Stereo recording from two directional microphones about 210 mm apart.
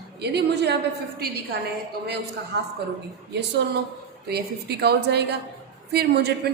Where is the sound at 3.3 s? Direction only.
55° right (ahead or behind).